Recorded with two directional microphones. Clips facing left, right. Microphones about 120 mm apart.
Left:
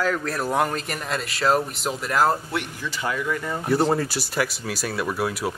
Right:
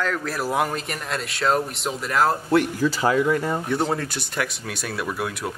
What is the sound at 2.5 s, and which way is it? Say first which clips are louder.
Speech: right 10 dB; 40° right (ahead or behind).